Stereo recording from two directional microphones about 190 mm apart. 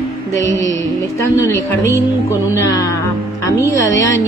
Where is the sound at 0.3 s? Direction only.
15° left (ahead or behind).